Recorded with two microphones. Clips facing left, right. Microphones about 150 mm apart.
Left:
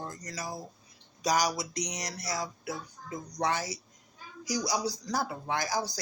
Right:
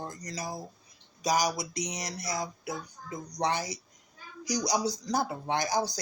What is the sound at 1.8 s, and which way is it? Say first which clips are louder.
Speech: right 1 dB; 25° right (ahead or behind).